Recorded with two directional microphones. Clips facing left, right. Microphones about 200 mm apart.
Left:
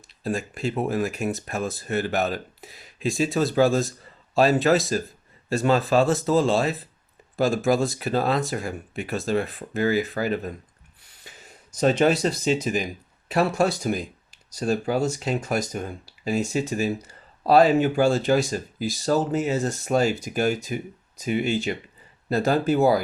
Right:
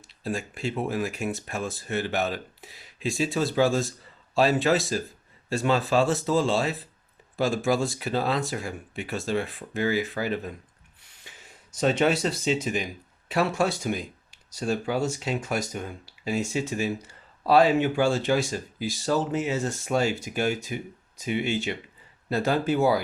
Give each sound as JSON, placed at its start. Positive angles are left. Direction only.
{"t": 0.2, "sound": "speech", "side_deg": 45}
{"t": 11.3, "sound": "a sound", "side_deg": 40}
{"t": 11.8, "sound": "speech", "side_deg": 40}